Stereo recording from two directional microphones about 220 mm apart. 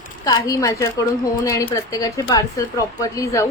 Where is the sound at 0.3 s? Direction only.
15° left (ahead or behind).